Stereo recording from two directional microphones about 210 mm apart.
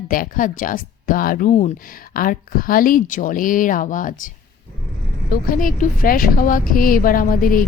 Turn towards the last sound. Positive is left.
turn(degrees=40)  # may be behind; listen again after turning